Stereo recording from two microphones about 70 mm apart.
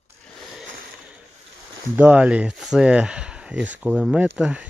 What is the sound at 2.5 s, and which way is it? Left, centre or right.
Speech, centre.